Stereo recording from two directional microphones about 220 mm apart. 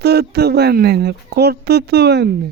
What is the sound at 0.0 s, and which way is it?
Speech, 45° right (ahead or behind).